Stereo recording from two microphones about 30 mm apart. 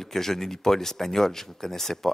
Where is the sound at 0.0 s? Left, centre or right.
Centre.